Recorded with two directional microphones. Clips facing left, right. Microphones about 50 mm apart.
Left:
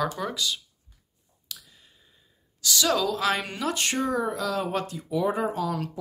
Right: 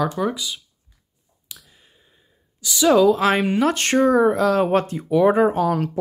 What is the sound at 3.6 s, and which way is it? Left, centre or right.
Speech, right.